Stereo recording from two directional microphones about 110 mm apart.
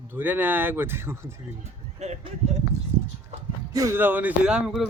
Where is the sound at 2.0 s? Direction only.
90° right.